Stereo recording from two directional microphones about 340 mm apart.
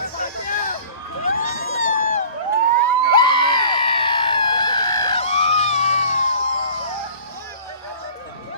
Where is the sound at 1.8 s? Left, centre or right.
Left.